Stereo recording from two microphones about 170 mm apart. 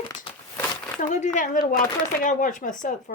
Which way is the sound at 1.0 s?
45° left (ahead or behind).